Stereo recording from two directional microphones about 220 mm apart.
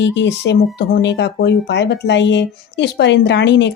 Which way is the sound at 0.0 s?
55° left (ahead or behind).